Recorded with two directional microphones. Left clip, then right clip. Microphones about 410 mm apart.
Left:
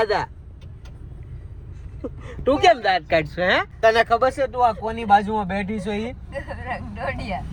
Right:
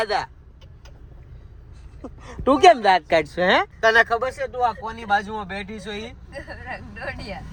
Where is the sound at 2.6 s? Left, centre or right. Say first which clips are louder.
Right 4 dB; right.